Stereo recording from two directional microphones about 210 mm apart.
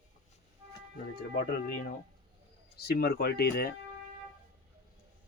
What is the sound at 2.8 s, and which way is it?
Speech, 50° left (ahead or behind).